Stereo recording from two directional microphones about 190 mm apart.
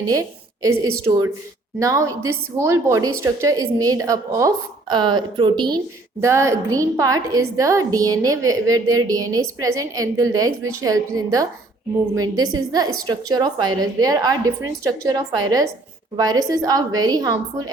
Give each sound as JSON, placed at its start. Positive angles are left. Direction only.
{"t": 0.0, "sound": "a woman's voice", "side_deg": -20}